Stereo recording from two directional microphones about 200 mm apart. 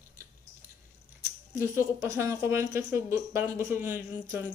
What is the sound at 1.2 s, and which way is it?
Speech, 15° right (ahead or behind).